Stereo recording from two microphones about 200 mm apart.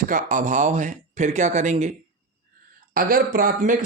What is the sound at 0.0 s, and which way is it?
Speech, 40° right (ahead or behind).